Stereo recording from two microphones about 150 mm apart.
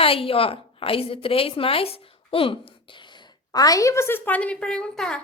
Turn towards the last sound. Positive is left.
turn(degrees=5)  # may be behind; listen again after turning